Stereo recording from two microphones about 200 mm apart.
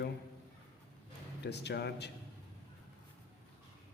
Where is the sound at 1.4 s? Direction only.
55° left (ahead or behind).